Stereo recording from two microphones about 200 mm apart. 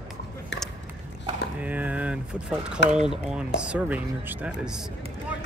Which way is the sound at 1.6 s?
5° right (ahead or behind).